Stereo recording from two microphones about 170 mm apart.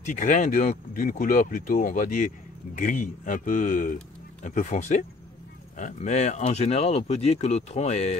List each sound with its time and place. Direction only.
0.0 s speech: 50° left (ahead or behind)